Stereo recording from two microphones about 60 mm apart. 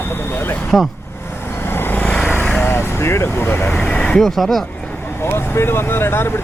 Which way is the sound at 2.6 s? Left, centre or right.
Left.